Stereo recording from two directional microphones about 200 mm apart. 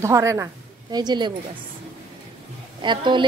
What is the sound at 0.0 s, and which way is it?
A woman's voice, 15° right (ahead or behind).